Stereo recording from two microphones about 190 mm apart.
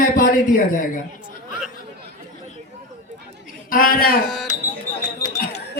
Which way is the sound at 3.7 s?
50° left (ahead or behind).